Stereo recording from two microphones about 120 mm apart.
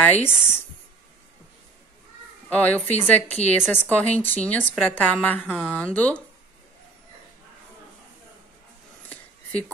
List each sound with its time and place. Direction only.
0.0 s speech: 15° left (ahead or behind)
2.5 s speech: 10° left (ahead or behind)
9.1 s a sound: 10° left (ahead or behind)